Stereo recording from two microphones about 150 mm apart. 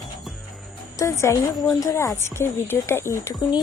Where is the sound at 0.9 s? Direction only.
20° left (ahead or behind).